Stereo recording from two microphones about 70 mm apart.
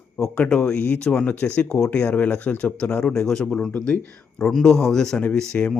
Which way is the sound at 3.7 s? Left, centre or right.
Centre.